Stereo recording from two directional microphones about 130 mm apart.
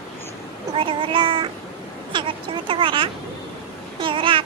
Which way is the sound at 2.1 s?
40° right (ahead or behind).